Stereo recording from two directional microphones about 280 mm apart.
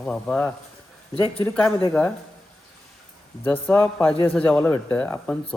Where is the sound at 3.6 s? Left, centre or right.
Centre.